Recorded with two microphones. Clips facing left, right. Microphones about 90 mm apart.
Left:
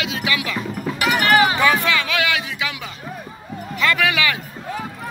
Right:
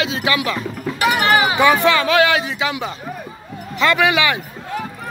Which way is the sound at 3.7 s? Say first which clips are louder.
Right 4 dB; 25° right (ahead or behind).